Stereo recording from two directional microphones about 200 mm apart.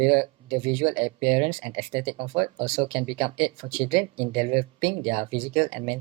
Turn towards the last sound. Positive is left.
turn(degrees=-25)  # may be behind; listen again after turning